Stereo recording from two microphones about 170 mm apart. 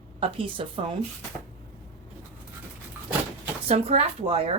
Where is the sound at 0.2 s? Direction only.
30° right (ahead or behind).